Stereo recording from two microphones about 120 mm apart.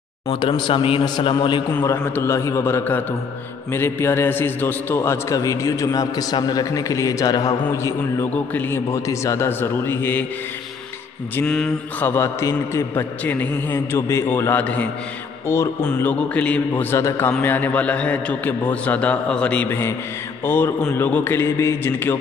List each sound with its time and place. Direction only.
0.3 s a man's voice: 45° left (ahead or behind)
1.7 s a man's voice: 20° left (ahead or behind)
11.4 s a man's voice: 5° left (ahead or behind)
12.1 s a man's voice: 25° left (ahead or behind)
13.2 s a man's voice: 15° left (ahead or behind)
15.4 s speech: 25° left (ahead or behind)
15.8 s a man's voice: 10° left (ahead or behind)